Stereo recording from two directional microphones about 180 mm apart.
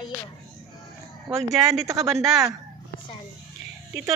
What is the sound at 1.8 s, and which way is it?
Speech, 15° right (ahead or behind).